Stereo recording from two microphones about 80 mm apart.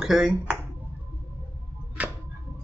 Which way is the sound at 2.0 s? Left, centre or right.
Centre.